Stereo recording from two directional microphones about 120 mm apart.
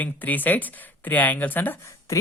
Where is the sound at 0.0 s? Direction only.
15° left (ahead or behind).